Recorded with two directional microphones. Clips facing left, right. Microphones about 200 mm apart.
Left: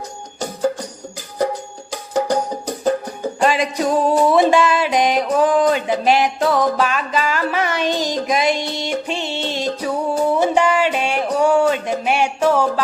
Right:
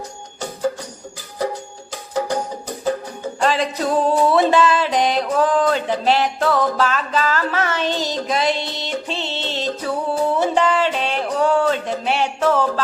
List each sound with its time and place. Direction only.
1.9 s music: 40° left (ahead or behind)
3.4 s music: 15° left (ahead or behind)